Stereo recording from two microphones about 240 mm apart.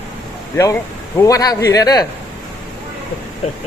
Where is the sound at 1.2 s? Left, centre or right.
Centre.